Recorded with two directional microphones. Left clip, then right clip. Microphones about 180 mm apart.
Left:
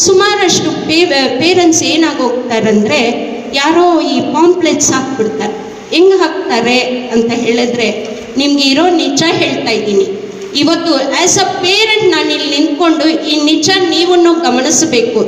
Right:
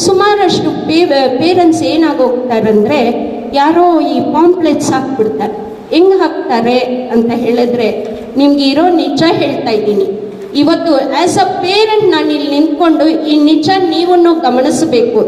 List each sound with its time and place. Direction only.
0.0 s a woman's voice: 40° right (ahead or behind)